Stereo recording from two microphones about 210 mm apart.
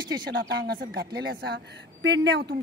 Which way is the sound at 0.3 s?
50° right (ahead or behind).